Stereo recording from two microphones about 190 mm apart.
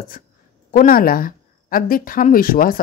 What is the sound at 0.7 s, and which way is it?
Speech, 45° left (ahead or behind).